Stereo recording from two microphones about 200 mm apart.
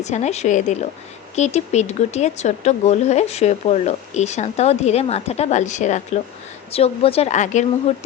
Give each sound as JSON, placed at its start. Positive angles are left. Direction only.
{"t": 0.0, "sound": "speech", "side_deg": 35}